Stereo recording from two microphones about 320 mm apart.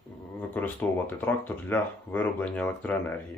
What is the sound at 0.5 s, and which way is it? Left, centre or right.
Speech, centre.